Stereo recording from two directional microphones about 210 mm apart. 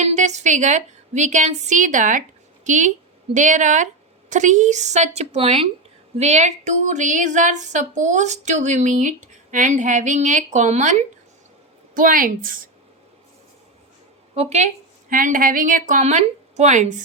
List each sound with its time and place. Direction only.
0.0 s speech: 35° right (ahead or behind)
11.9 s speech: 40° right (ahead or behind)
14.3 s speech: 30° right (ahead or behind)